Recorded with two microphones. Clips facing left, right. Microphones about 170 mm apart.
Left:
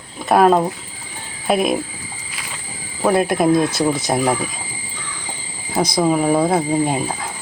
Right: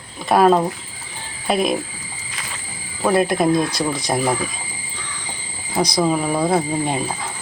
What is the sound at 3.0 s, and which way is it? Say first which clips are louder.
Speech: left 1 dB; centre (ahead or behind).